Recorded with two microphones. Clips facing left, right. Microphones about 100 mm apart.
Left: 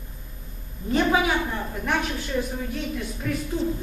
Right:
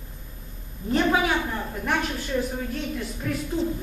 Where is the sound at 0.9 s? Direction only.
Centre (ahead or behind).